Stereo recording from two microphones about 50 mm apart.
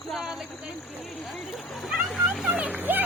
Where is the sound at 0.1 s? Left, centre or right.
Centre.